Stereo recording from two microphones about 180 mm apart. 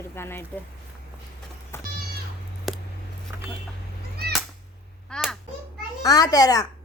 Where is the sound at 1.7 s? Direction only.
15° left (ahead or behind).